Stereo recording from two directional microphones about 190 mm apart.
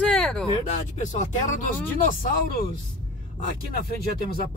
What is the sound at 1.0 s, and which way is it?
Speech, 40° left (ahead or behind).